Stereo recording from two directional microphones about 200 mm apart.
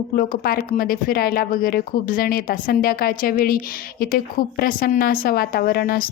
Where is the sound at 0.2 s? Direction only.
50° left (ahead or behind).